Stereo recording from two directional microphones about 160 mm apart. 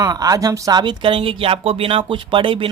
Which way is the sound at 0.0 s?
20° right (ahead or behind).